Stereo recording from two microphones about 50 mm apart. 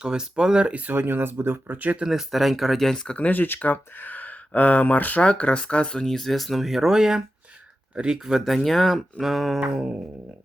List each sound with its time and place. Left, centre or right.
0.0 s speech: centre
0.7 s speech: right
0.9 s speech: right
2.0 s speech: centre
2.8 s speech: centre
3.2 s speech: left
5.2 s speech: left; by 8.4 s centre
8.4 s speech: centre